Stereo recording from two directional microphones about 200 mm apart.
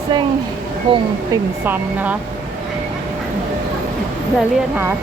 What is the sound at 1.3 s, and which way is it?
Speech, 10° right (ahead or behind).